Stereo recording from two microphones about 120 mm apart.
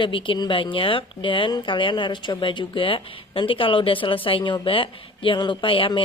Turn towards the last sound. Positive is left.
turn(degrees=45)  # may be behind; listen again after turning